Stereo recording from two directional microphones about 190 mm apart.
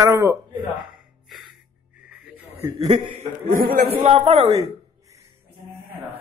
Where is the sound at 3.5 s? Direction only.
45° right (ahead or behind).